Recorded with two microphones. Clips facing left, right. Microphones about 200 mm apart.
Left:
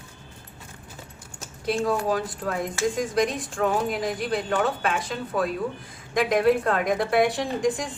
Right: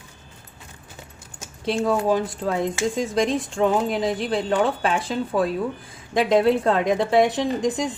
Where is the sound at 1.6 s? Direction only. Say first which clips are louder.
Right 3 dB; 25° right (ahead or behind).